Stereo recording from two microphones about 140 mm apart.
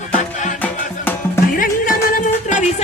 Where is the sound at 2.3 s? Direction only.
55° left (ahead or behind).